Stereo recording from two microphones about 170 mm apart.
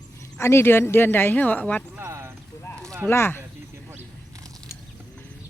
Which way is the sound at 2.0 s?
15° right (ahead or behind).